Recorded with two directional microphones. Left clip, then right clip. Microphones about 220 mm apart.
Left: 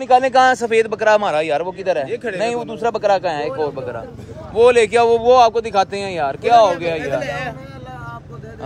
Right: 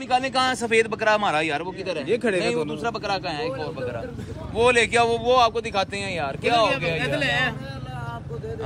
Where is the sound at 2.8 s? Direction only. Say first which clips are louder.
Left 10 dB; 30° left (ahead or behind).